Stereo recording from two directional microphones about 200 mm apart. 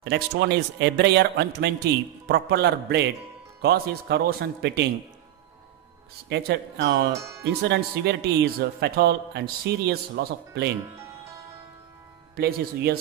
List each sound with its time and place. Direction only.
0.0 s a man's voice: 60° right (ahead or behind)
6.2 s a man's voice: 60° right (ahead or behind)
12.4 s speech: 50° right (ahead or behind)